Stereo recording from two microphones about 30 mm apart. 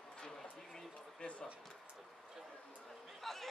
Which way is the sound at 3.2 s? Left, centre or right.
Centre.